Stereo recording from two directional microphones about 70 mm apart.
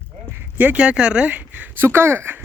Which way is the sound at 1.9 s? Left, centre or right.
Right.